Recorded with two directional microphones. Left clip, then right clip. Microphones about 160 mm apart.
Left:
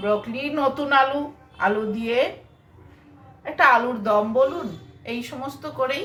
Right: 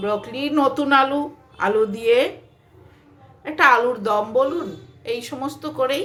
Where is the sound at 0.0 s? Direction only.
80° right.